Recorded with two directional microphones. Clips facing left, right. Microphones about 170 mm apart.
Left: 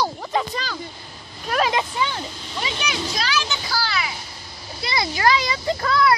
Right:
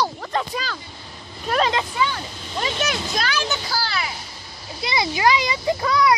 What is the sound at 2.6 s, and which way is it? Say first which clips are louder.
Speech: right 2 dB; 45° right (ahead or behind).